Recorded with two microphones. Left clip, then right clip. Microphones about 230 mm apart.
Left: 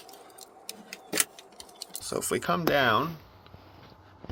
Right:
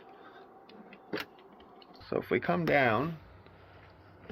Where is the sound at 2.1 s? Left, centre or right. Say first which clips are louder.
Left 2 dB; centre.